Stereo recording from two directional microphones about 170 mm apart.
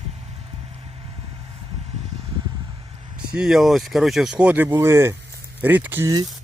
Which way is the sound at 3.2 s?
5° right (ahead or behind).